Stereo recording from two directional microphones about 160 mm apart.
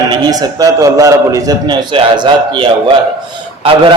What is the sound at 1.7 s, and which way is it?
Speech, 30° right (ahead or behind).